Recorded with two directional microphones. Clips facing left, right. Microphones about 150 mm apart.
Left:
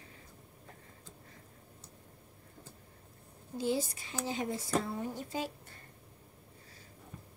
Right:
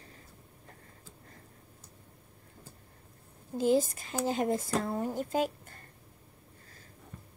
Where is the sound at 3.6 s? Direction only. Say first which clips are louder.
Right 7 dB; 45° right (ahead or behind).